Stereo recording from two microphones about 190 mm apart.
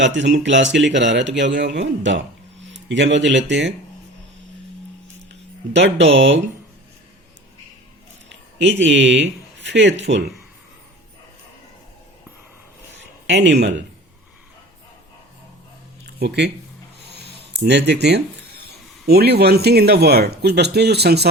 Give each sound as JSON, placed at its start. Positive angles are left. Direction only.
{"t": 0.0, "sound": "speech", "side_deg": -70}
{"t": 5.3, "sound": "speech", "side_deg": -70}
{"t": 8.5, "sound": "speech", "side_deg": -70}
{"t": 13.2, "sound": "speech", "side_deg": -70}
{"t": 16.0, "sound": "a sound", "side_deg": -60}
{"t": 18.6, "sound": "speech", "side_deg": -55}